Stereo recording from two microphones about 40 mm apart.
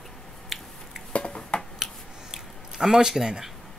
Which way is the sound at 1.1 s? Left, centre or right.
Left.